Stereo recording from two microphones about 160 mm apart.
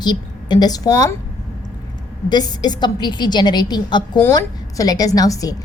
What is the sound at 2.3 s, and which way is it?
A woman's voice, 25° left (ahead or behind).